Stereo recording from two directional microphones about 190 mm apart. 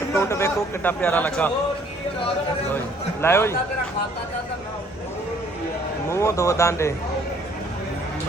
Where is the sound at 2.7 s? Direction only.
10° left (ahead or behind).